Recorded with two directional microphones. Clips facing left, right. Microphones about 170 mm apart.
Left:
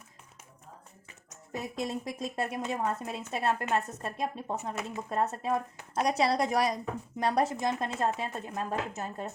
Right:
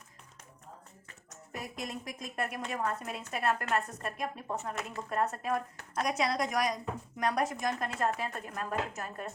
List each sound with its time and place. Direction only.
1.5 s a woman's voice: 25° left (ahead or behind)